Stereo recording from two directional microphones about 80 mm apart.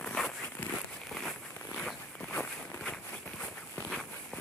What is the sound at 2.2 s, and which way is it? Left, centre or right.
Walk, centre.